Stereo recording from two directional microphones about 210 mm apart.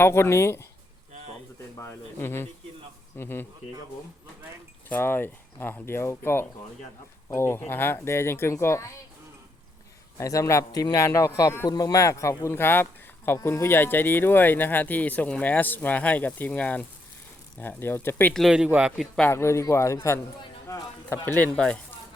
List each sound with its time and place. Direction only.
0.0 s speech: 10° left (ahead or behind)
1.8 s speech: 10° left (ahead or behind)
4.9 s speech: 10° left (ahead or behind)
10.2 s speech: 15° left (ahead or behind)